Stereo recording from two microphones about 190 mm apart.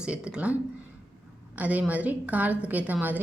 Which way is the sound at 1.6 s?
10° right (ahead or behind).